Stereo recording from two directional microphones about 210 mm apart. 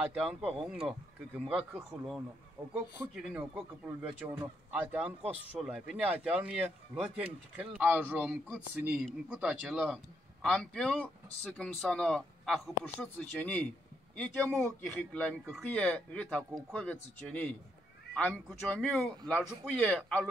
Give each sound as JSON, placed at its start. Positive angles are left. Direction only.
{"t": 0.0, "sound": "speech", "side_deg": -5}